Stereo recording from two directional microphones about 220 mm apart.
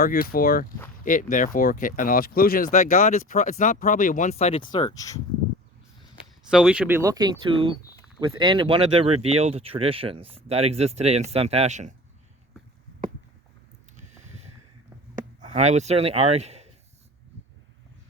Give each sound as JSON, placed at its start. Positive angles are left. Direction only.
{"t": 0.0, "sound": "speech", "side_deg": 40}
{"t": 6.5, "sound": "speech", "side_deg": -5}
{"t": 15.5, "sound": "speech", "side_deg": -30}